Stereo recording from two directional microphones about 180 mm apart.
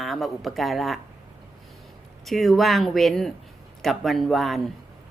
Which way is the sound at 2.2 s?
Centre (ahead or behind).